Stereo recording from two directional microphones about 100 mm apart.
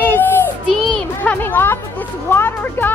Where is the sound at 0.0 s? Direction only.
20° left (ahead or behind).